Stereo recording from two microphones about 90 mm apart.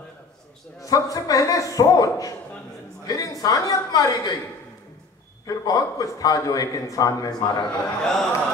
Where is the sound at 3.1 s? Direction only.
40° left (ahead or behind).